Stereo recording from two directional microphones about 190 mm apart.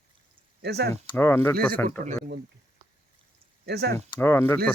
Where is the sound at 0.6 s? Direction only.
60° right (ahead or behind).